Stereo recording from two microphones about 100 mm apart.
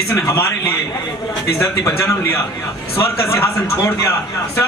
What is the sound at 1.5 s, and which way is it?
A man's voice, 30° left (ahead or behind).